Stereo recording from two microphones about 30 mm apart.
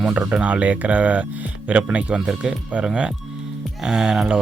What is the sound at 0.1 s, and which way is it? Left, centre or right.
Speech, right.